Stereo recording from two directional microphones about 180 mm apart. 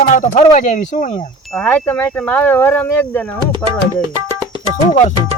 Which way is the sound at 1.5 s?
5° left (ahead or behind).